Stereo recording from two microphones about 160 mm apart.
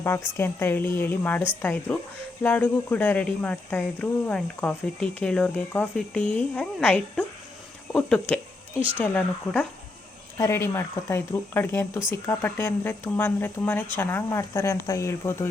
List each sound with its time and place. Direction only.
0.0 s speech: 15° left (ahead or behind)